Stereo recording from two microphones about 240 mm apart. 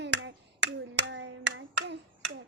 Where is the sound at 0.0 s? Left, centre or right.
Right.